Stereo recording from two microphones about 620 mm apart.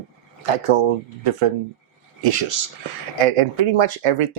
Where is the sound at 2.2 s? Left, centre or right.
Right.